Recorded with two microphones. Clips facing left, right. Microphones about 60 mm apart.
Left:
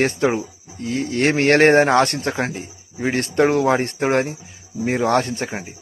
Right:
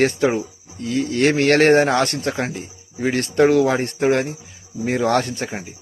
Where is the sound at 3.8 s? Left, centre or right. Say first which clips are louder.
Right 2 dB; left.